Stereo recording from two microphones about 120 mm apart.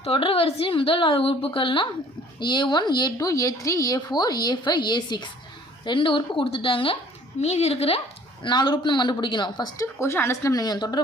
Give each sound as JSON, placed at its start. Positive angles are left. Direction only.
{"t": 0.0, "sound": "a woman's voice", "side_deg": 50}
{"t": 7.4, "sound": "a woman's voice", "side_deg": 60}
{"t": 8.4, "sound": "speech", "side_deg": 40}
{"t": 9.7, "sound": "speech", "side_deg": 25}